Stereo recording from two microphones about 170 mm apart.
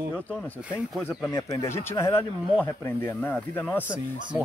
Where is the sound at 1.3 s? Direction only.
20° left (ahead or behind).